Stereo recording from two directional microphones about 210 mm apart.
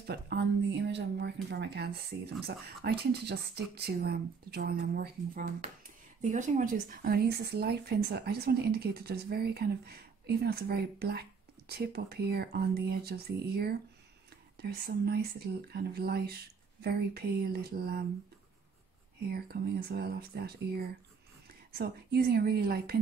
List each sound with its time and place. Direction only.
0.0 s speech: 50° right (ahead or behind)
19.3 s speech: 50° right (ahead or behind)